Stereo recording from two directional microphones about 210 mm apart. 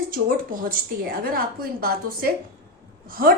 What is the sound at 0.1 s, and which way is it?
A woman's voice, 40° right (ahead or behind).